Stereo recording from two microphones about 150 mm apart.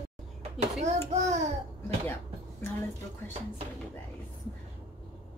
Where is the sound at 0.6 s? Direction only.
50° right (ahead or behind).